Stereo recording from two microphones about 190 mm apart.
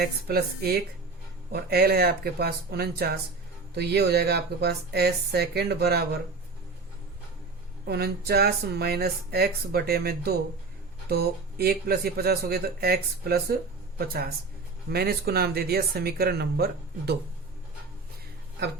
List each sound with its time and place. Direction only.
0.0 s speech: 55° right (ahead or behind)
7.9 s speech: 55° right (ahead or behind)